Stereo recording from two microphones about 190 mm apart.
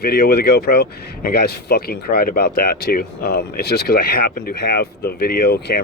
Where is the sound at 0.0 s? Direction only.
55° left (ahead or behind).